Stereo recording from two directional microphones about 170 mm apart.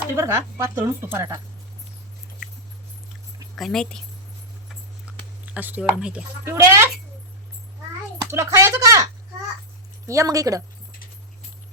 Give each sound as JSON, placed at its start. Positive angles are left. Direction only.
{"t": 0.2, "sound": "speech", "side_deg": -15}
{"t": 3.5, "sound": "a woman's voice", "side_deg": 0}
{"t": 5.1, "sound": "a sound", "side_deg": -5}
{"t": 5.5, "sound": "speech", "side_deg": -10}
{"t": 8.2, "sound": "speech", "side_deg": -15}
{"t": 10.1, "sound": "speech", "side_deg": -20}